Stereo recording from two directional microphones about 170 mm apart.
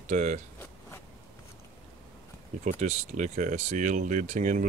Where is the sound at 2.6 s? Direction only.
45° right (ahead or behind).